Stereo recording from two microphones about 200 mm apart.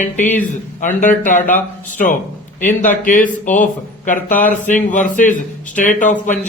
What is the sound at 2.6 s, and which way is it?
Speech, 40° left (ahead or behind).